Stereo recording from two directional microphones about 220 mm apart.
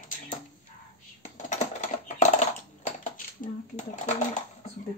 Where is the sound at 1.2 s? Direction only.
35° left (ahead or behind).